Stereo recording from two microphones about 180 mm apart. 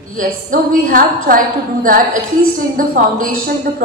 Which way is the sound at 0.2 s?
50° right (ahead or behind).